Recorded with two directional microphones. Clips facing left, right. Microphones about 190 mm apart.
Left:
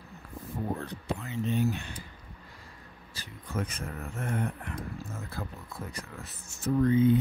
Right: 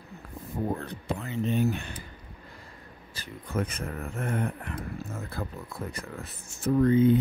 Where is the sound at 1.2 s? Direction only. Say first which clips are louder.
Right 3 dB; 55° right (ahead or behind).